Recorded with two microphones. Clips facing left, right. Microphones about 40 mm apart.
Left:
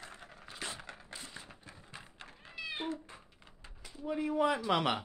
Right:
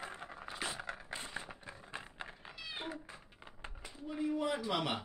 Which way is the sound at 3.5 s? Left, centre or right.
Right.